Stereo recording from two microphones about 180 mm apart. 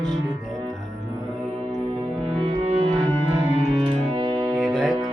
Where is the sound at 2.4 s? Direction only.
35° right (ahead or behind).